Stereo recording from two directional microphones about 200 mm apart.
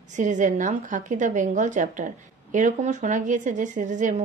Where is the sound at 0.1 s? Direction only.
40° right (ahead or behind).